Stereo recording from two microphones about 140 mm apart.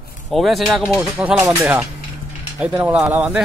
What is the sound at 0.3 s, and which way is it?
A man's voice, centre (ahead or behind).